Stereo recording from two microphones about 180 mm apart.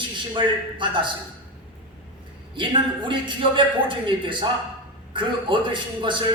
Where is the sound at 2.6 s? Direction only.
25° right (ahead or behind).